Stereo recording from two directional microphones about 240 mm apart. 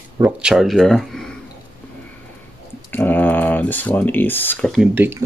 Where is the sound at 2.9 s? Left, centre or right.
Centre.